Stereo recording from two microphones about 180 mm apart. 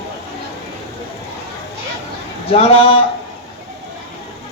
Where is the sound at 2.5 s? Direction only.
30° left (ahead or behind).